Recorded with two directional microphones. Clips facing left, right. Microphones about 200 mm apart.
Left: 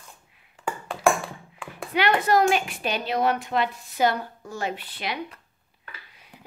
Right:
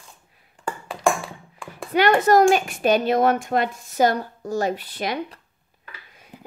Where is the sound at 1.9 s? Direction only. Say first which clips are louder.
Right 5 dB; 45° right (ahead or behind).